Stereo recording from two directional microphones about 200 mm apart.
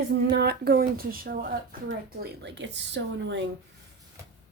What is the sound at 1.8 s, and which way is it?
Speech, 60° right (ahead or behind).